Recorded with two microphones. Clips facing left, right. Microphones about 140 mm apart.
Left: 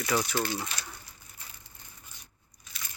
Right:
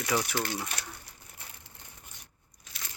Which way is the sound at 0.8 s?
65° right (ahead or behind).